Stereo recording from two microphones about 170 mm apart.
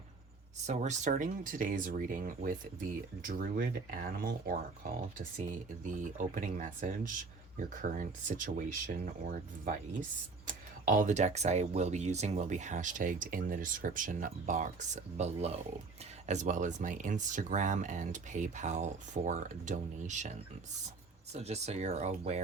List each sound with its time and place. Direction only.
0.7 s speech: 45° right (ahead or behind)
21.3 s speech: 40° right (ahead or behind)